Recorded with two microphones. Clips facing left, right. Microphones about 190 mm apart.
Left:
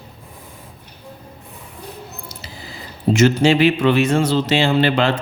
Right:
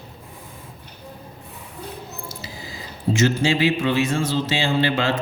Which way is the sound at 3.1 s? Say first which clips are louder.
Left 5 dB; 70° left (ahead or behind).